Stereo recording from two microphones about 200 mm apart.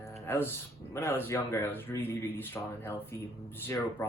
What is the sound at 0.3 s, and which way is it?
Speech, 10° left (ahead or behind).